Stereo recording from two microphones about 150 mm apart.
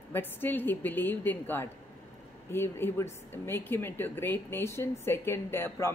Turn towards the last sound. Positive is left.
turn(degrees=15)  # may be behind; listen again after turning